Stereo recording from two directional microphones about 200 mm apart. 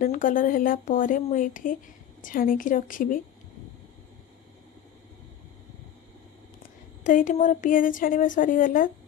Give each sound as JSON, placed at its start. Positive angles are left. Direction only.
{"t": 0.0, "sound": "speech", "side_deg": 40}
{"t": 7.0, "sound": "speech", "side_deg": 40}